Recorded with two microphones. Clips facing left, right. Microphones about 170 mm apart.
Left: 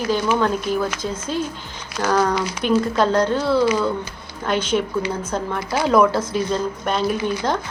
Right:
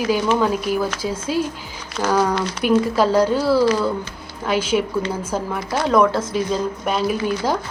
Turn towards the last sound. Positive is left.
turn(degrees=-5)  # may be behind; listen again after turning